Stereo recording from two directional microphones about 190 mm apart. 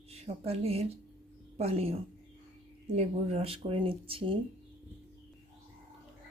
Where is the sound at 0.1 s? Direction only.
30° right (ahead or behind).